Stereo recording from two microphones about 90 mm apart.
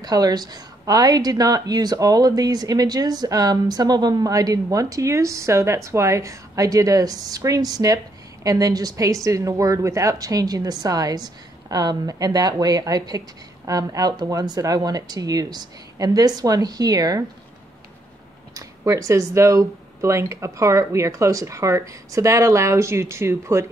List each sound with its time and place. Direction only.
0.0 s a woman's voice: 45° right (ahead or behind)
18.5 s speech: 40° right (ahead or behind)